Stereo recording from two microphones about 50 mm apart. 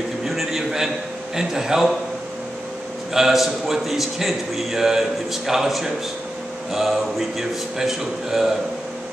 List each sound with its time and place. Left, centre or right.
0.2 s a sound: centre
1.3 s a man's voice: centre
3.1 s a man's voice: centre